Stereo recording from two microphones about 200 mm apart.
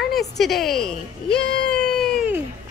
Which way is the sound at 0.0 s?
Centre (ahead or behind).